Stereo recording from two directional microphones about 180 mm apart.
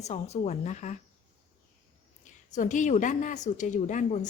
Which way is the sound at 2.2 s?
45° left (ahead or behind).